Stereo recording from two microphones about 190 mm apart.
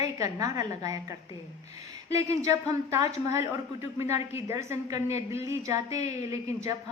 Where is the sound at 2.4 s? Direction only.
15° right (ahead or behind).